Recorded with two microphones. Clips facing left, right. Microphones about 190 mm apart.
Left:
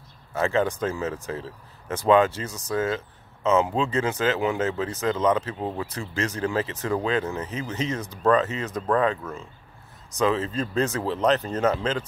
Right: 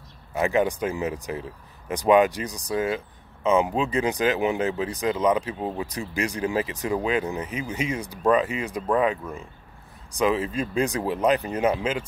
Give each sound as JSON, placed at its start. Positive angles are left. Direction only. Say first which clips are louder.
{"t": 0.3, "sound": "speech", "louder": "right 1 dB", "side_deg": -15}